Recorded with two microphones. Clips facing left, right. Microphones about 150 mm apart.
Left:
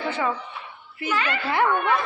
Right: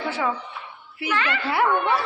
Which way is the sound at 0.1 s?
5° right (ahead or behind).